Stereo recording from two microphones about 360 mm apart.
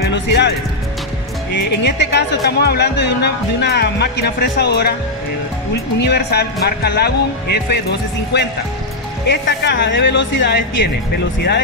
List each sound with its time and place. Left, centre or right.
0.1 s music: left
1.5 s speech: left
5.9 s speech: left